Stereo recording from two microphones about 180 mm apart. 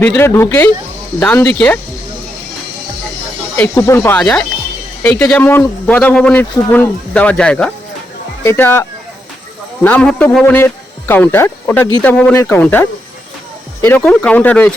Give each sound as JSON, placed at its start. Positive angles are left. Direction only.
{"t": 0.0, "sound": "speech", "side_deg": 10}
{"t": 3.8, "sound": "speech", "side_deg": 15}
{"t": 4.2, "sound": "speech", "side_deg": 5}